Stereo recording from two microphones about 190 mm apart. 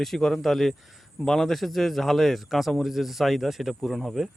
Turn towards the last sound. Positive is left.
turn(degrees=0)  # may be behind; listen again after turning